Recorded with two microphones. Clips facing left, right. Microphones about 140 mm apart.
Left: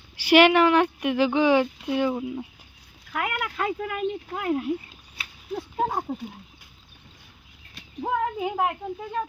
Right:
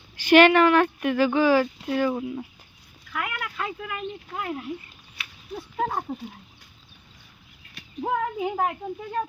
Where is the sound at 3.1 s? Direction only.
45° left (ahead or behind).